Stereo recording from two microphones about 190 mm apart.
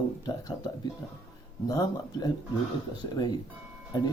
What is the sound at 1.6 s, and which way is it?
Speech, 20° left (ahead or behind).